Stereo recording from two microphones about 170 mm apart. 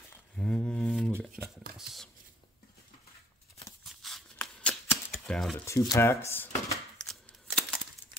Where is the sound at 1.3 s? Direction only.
5° right (ahead or behind).